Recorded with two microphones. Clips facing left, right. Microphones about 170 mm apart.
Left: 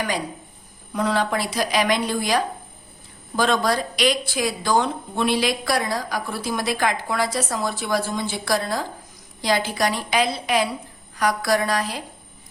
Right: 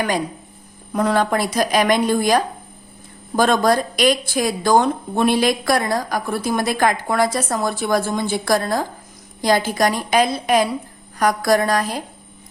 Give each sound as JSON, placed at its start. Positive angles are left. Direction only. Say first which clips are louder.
{"t": 0.9, "sound": "speech", "louder": "right 4 dB", "side_deg": -50}